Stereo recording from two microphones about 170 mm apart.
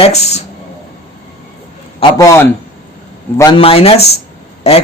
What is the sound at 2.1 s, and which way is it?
A man's voice, 20° left (ahead or behind).